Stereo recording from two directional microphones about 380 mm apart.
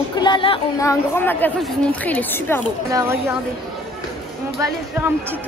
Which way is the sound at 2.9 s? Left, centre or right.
Centre.